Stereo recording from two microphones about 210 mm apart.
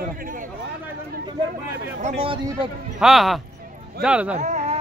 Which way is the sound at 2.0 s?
30° right (ahead or behind).